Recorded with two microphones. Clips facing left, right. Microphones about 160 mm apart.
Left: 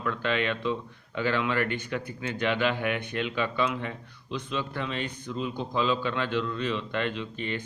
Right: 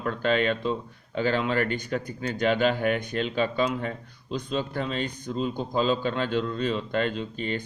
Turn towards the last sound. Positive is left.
turn(degrees=-40)  # may be behind; listen again after turning